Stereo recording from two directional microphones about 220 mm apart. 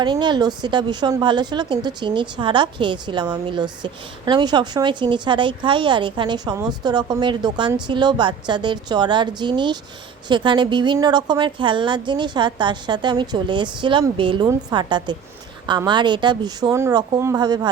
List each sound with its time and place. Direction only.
0.0 s a woman's voice: 20° right (ahead or behind)